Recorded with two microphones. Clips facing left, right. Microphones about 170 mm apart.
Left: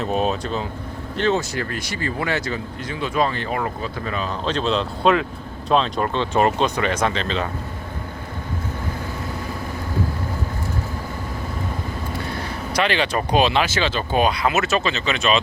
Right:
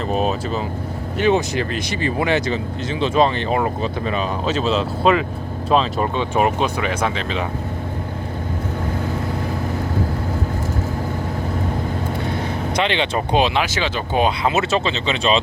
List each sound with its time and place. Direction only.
0.0 s speech: centre (ahead or behind)
1.1 s speech: 15° right (ahead or behind)
4.4 s speech: 5° right (ahead or behind)
12.7 s speech: 20° right (ahead or behind)